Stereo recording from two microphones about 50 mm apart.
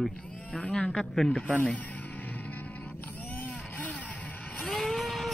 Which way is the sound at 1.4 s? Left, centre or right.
Left.